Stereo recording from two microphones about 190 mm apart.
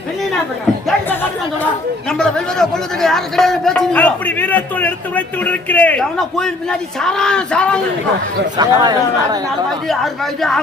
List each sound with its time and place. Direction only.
2.0 s a man's voice: 5° left (ahead or behind)
8.5 s speech: 20° right (ahead or behind)
9.6 s a man's voice: centre (ahead or behind)